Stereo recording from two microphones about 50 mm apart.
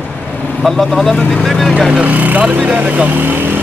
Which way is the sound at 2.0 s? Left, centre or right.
Right.